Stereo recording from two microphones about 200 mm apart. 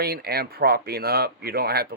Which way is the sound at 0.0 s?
50° right (ahead or behind).